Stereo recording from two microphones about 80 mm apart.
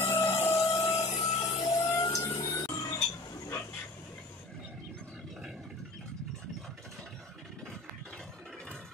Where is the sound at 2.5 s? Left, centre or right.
Left.